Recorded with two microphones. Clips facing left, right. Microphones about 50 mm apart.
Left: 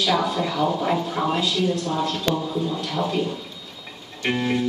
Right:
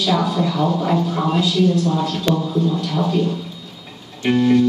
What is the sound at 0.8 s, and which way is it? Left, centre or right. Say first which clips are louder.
Music: right 3 dB; centre.